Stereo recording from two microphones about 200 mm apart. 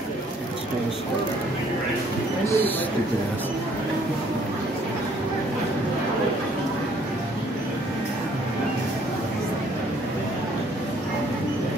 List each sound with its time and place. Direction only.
2.4 s speech: 10° left (ahead or behind)